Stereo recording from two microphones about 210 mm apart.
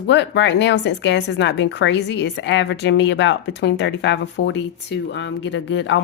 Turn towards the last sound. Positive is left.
turn(degrees=60)  # may be behind; listen again after turning